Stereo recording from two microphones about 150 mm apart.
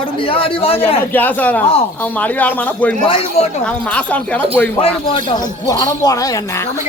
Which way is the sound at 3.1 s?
40° left (ahead or behind).